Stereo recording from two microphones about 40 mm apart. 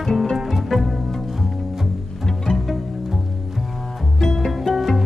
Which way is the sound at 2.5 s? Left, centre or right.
Centre.